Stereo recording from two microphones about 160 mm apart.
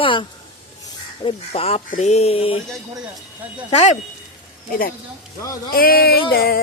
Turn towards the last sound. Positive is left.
turn(degrees=70)  # may be behind; listen again after turning